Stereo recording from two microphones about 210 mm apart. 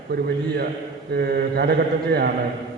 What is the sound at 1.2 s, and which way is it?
A man's voice, 50° right (ahead or behind).